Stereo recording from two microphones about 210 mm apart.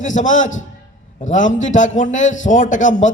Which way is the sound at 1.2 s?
35° left (ahead or behind).